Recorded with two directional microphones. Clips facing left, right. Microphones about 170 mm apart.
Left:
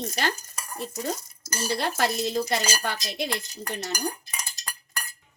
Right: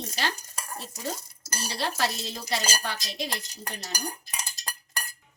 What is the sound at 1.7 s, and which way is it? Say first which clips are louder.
Speech: left 4 dB; 55° left (ahead or behind).